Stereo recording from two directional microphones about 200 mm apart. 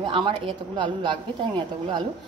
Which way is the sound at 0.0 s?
25° right (ahead or behind).